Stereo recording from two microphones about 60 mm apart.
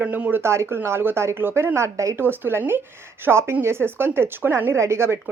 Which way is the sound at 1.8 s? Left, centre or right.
Right.